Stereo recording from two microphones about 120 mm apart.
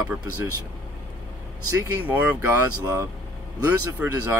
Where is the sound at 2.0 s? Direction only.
15° right (ahead or behind).